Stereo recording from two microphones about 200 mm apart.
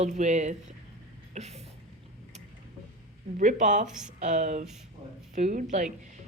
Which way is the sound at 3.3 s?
40° right (ahead or behind).